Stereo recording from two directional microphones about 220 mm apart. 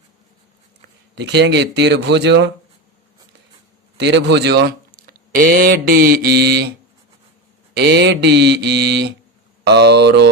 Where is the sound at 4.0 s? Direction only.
50° right (ahead or behind).